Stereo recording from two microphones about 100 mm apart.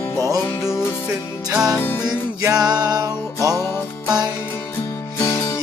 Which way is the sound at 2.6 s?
40° right (ahead or behind).